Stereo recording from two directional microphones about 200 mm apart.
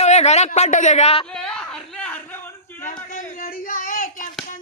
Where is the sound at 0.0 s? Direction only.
35° left (ahead or behind).